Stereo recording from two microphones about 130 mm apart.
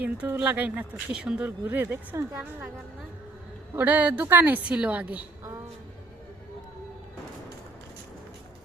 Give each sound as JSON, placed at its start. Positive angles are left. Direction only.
{"t": 0.0, "sound": "speech", "side_deg": -10}
{"t": 3.8, "sound": "speech", "side_deg": -15}